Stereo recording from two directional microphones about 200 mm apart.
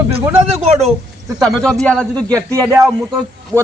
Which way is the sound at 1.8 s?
5° left (ahead or behind).